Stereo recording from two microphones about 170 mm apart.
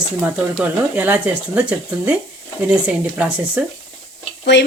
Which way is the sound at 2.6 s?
5° right (ahead or behind).